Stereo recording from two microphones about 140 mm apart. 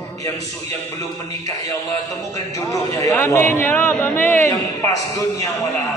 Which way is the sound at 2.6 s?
20° left (ahead or behind).